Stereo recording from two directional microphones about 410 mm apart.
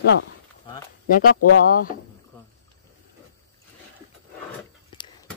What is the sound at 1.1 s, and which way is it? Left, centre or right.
Speech, left.